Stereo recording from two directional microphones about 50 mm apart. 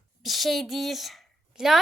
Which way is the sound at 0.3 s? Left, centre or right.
Centre.